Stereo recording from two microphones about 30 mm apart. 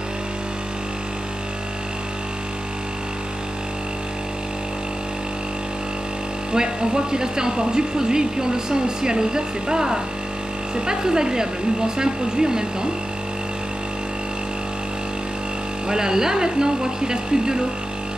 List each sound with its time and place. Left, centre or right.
6.5 s speech: right
15.9 s speech: right